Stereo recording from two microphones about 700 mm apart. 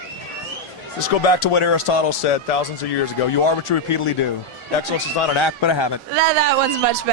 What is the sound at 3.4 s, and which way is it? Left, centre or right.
Speech, left.